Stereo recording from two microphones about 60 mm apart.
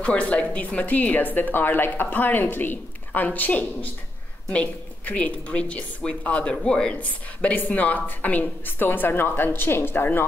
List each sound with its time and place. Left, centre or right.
0.0 s a woman's voice: left